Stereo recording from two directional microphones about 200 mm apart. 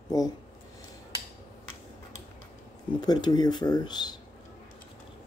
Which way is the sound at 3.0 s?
20° left (ahead or behind).